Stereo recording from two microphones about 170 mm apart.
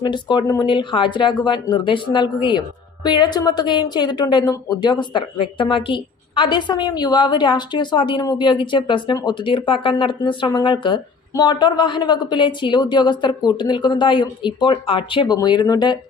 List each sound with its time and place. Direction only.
0.0 s speech: 25° left (ahead or behind)